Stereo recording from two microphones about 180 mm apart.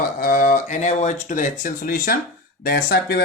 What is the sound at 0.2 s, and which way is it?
Speech, 50° left (ahead or behind).